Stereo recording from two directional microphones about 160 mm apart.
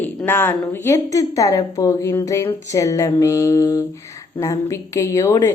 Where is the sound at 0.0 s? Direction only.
10° left (ahead or behind).